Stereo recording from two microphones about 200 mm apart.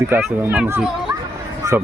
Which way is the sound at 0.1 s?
5° right (ahead or behind).